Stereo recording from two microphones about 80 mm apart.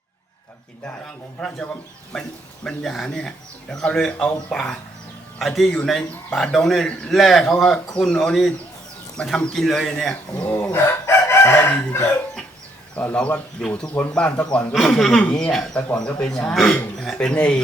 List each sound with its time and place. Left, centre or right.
1.0 s a man's voice: centre
2.6 s a man's voice: centre
10.4 s chicken: left
13.0 s a man's voice: centre
14.8 s a man's voice: centre